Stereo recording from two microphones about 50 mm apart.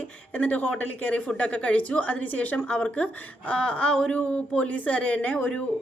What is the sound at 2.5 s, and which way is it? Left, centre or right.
A woman's voice, left.